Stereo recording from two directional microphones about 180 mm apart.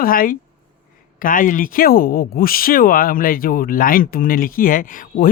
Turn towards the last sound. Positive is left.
turn(degrees=50)  # may be behind; listen again after turning